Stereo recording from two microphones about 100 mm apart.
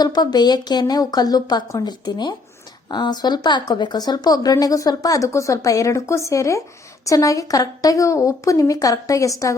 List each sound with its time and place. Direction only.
0.0 s speech: 45° left (ahead or behind)